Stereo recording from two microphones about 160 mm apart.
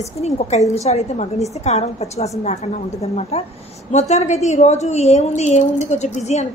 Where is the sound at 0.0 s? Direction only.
45° left (ahead or behind).